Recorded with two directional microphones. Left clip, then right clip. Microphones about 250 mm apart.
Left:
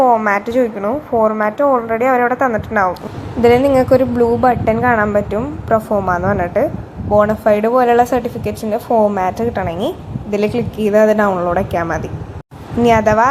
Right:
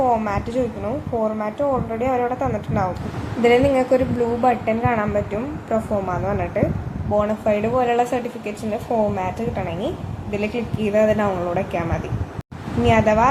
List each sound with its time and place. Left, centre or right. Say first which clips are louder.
0.0 s a woman's voice: left 8 dB; centre